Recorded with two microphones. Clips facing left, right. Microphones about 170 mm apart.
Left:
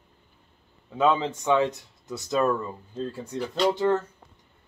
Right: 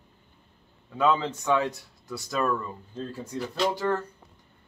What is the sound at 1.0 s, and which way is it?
Speech, 20° left (ahead or behind).